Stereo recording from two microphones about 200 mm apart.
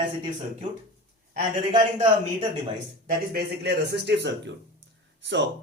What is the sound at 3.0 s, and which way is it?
Speech, 50° right (ahead or behind).